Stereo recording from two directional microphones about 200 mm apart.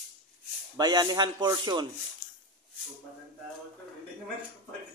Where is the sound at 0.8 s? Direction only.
20° right (ahead or behind).